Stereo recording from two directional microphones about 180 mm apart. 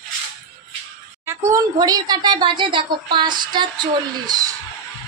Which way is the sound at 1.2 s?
15° right (ahead or behind).